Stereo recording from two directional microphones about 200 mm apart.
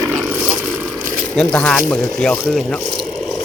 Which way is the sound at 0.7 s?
5° right (ahead or behind).